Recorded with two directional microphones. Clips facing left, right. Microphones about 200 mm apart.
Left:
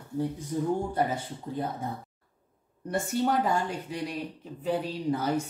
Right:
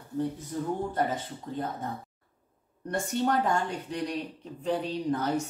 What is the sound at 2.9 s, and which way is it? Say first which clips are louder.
Speech: left 1 dB; 5° left (ahead or behind).